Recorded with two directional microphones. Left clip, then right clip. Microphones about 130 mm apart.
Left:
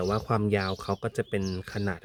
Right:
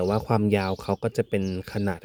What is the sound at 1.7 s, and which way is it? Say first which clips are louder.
Speech: right 3 dB; 35° right (ahead or behind).